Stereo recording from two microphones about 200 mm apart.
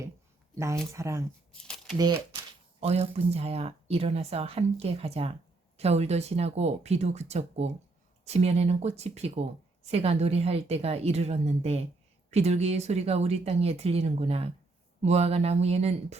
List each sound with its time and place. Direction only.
0.9 s speech: 15° right (ahead or behind)
1.5 s speech: 5° left (ahead or behind)
2.0 s speech: 20° right (ahead or behind)
2.8 s speech: 30° right (ahead or behind)